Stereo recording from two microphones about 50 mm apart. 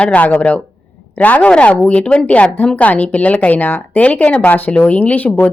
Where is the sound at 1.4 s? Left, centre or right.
Left.